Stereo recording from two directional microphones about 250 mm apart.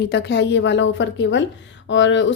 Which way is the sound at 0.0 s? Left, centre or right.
Left.